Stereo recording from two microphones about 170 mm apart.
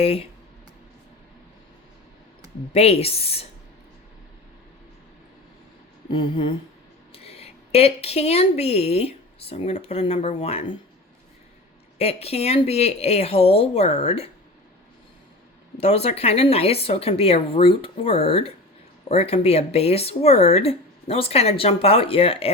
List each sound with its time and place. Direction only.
0.0 s speech: 35° left (ahead or behind)
2.7 s speech: 35° left (ahead or behind)
6.1 s a sound: 30° left (ahead or behind)
7.1 s a woman's voice: 35° left (ahead or behind)
11.9 s speech: 35° left (ahead or behind)
15.8 s speech: 35° left (ahead or behind)